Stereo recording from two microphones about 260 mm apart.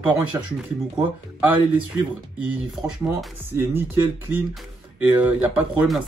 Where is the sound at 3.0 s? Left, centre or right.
Centre.